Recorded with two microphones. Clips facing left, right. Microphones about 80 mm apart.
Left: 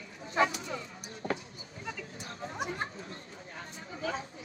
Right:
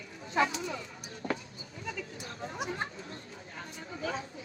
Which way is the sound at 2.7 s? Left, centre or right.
Right.